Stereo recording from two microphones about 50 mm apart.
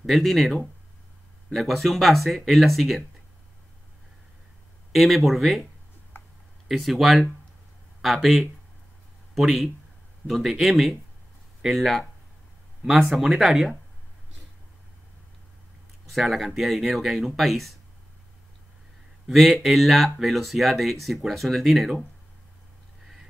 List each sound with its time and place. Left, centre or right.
0.0 s speech: centre
4.9 s speech: centre
6.1 s tick-tock: left
6.7 s speech: centre
16.1 s speech: centre
19.2 s speech: centre